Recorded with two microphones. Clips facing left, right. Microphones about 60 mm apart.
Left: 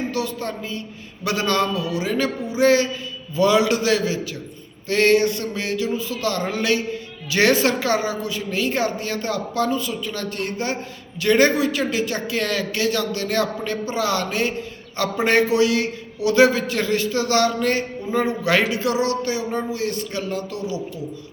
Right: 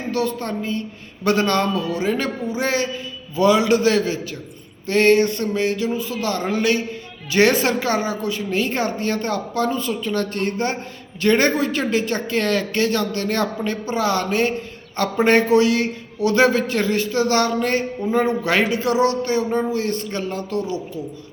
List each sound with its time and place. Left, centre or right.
0.1 s a man's voice: right